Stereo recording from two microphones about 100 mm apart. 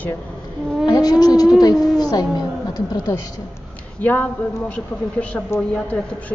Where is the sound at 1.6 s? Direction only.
40° left (ahead or behind).